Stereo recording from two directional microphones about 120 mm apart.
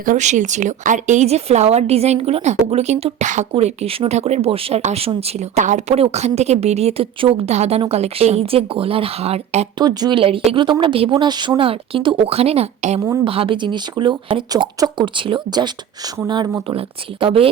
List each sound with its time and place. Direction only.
0.1 s speech: 85° right
3.5 s speech: 60° right (ahead or behind)
9.7 s speech: 35° right (ahead or behind); by 13.0 s 65° right (ahead or behind)
13.2 s speech: 50° right (ahead or behind)